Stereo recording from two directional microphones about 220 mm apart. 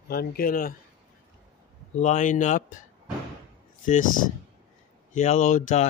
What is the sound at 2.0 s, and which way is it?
Speech, 35° left (ahead or behind).